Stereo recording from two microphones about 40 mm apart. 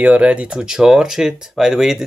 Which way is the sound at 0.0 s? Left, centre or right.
Right.